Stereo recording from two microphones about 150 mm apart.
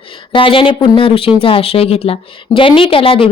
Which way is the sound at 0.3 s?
35° left (ahead or behind).